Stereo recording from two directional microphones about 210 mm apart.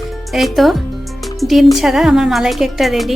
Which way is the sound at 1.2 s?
Centre (ahead or behind).